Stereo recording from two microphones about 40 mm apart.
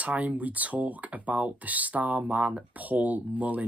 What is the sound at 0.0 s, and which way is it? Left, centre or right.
Speech, right.